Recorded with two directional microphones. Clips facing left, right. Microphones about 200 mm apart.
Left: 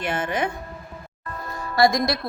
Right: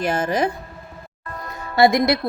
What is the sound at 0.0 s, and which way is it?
Speech, 40° right (ahead or behind).